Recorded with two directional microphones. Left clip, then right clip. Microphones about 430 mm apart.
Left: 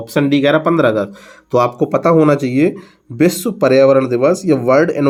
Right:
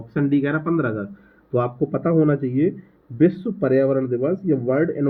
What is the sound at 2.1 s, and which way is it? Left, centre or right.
Speech, left.